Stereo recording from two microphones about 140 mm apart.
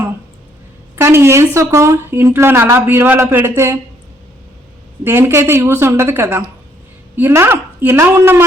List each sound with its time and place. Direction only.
0.9 s a woman's voice: 20° right (ahead or behind)
5.0 s a woman's voice: 20° right (ahead or behind)